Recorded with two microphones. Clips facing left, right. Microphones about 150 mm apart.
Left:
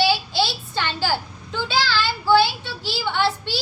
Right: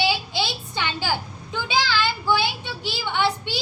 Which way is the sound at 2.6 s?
15° right (ahead or behind).